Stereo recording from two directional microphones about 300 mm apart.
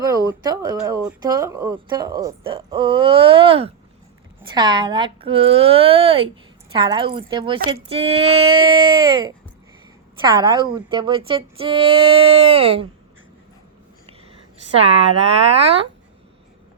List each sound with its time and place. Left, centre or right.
0.0 s speech: centre
14.8 s speech: centre